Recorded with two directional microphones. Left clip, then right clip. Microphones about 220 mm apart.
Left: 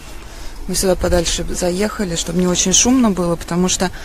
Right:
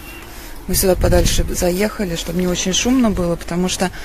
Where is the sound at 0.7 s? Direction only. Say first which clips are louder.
Right 1 dB; centre (ahead or behind).